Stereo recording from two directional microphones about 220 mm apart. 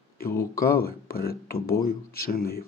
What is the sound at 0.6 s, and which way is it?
Speech, 45° left (ahead or behind).